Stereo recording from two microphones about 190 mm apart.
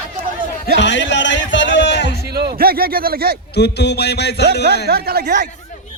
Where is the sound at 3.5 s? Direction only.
60° left (ahead or behind).